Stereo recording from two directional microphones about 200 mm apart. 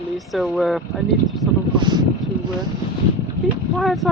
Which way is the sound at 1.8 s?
20° right (ahead or behind).